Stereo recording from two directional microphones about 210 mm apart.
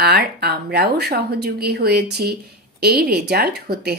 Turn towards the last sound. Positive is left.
turn(degrees=-50)  # may be behind; listen again after turning